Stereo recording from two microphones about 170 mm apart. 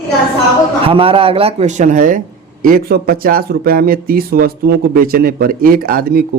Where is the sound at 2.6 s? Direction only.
60° right (ahead or behind).